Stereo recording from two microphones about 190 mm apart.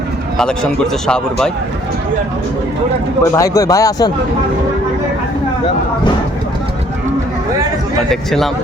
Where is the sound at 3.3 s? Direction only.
15° left (ahead or behind).